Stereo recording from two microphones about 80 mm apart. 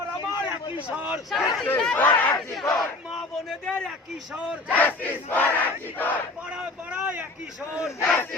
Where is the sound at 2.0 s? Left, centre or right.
Left.